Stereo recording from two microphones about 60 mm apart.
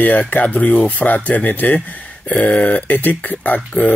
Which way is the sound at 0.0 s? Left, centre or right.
Left.